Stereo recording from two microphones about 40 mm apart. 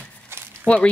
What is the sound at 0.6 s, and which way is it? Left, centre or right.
Speech, left.